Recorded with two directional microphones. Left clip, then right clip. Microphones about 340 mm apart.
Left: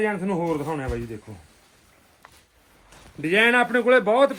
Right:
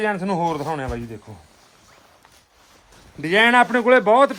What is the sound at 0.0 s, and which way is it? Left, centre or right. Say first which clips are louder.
A man's voice: right 3 dB; centre.